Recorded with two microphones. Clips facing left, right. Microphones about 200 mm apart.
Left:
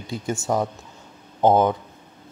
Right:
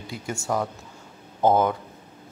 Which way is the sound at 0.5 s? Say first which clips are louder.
Left 2 dB; 20° left (ahead or behind).